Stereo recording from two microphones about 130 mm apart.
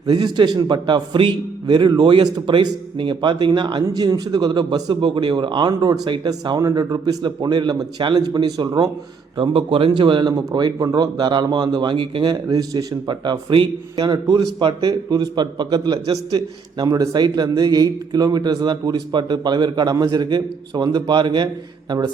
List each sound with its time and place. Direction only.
0.0 s a man's voice: 35° right (ahead or behind)